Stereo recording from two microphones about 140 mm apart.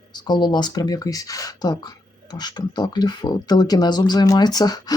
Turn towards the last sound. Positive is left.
turn(degrees=25)  # may be behind; listen again after turning